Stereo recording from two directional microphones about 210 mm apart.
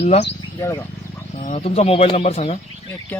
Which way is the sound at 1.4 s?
30° left (ahead or behind).